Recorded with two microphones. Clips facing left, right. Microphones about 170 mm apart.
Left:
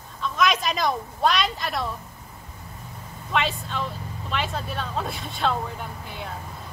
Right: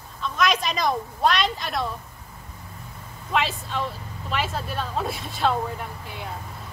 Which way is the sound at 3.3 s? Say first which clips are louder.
Right 1 dB; centre (ahead or behind).